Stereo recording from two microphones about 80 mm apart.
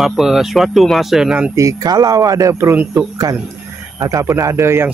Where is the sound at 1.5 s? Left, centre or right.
Right.